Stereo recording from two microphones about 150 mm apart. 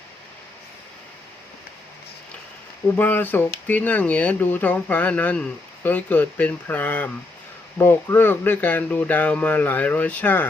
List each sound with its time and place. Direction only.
2.8 s speech: 10° left (ahead or behind)